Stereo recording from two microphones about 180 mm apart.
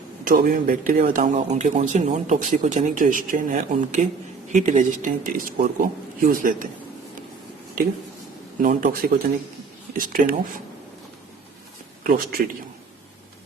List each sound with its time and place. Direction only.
0.3 s speech: 55° right (ahead or behind)
8.6 s speech: 50° right (ahead or behind)
12.0 s speech: 55° right (ahead or behind)